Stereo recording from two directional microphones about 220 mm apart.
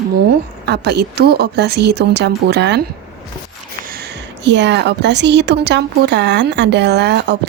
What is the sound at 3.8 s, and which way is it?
Speech, 45° right (ahead or behind).